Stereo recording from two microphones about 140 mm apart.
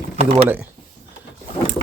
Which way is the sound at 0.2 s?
50° right (ahead or behind).